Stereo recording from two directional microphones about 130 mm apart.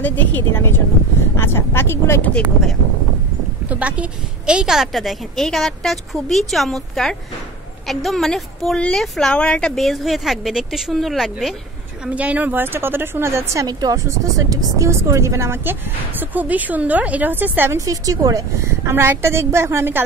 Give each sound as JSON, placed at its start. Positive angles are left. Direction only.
{"t": 0.0, "sound": "speech", "side_deg": 15}
{"t": 3.6, "sound": "a woman's voice", "side_deg": -10}